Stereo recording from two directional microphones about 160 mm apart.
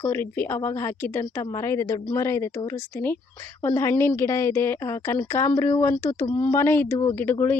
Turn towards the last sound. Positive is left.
turn(degrees=10)  # may be behind; listen again after turning